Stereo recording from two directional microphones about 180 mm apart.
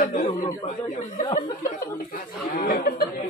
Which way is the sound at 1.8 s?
50° left (ahead or behind).